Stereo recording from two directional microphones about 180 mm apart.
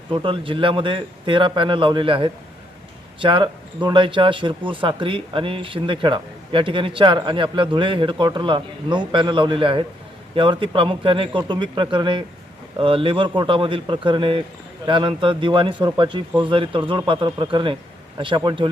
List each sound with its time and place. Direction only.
0.1 s speech: 30° right (ahead or behind)